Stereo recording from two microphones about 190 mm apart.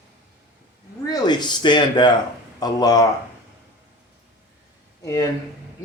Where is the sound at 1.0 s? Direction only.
20° left (ahead or behind).